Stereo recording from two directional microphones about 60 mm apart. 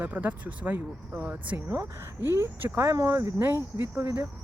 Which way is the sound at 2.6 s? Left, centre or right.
Right.